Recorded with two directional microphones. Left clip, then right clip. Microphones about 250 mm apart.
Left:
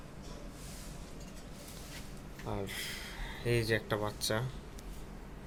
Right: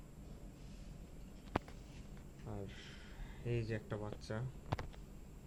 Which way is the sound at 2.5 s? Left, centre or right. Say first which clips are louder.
Left 12 dB; centre.